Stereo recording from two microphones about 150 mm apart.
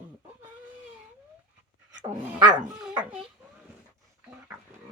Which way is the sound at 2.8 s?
10° right (ahead or behind).